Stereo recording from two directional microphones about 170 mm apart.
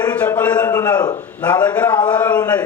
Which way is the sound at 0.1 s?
10° left (ahead or behind).